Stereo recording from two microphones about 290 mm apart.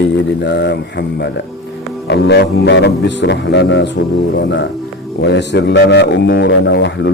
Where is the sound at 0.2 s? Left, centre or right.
Left.